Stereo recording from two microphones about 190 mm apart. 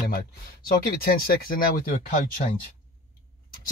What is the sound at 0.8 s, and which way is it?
Speech, 50° left (ahead or behind).